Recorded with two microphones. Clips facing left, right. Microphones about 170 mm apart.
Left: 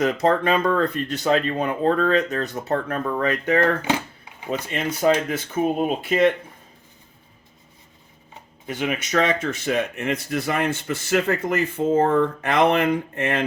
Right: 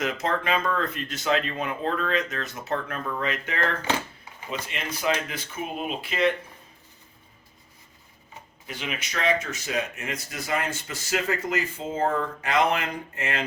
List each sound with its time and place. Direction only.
0.0 s speech: 35° left (ahead or behind)
8.7 s speech: 50° left (ahead or behind)